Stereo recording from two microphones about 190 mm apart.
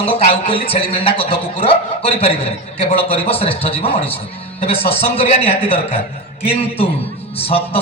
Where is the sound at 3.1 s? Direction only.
30° left (ahead or behind).